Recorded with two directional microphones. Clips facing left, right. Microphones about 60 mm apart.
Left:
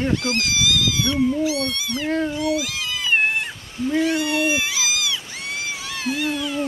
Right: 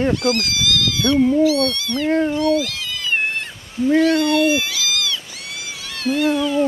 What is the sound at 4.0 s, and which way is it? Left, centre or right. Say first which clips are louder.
Speech: right 4 dB; centre.